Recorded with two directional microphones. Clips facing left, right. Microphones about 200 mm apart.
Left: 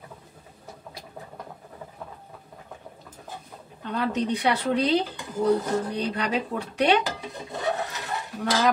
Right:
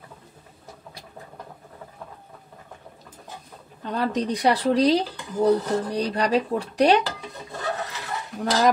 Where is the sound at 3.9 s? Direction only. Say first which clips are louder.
Right 1 dB; 40° right (ahead or behind).